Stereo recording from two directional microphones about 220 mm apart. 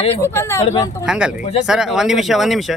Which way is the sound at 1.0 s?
5° right (ahead or behind).